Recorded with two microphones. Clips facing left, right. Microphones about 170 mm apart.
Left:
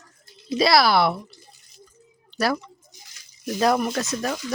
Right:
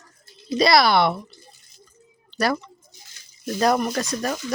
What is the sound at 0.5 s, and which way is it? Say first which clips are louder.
Speech: right 1 dB; centre (ahead or behind).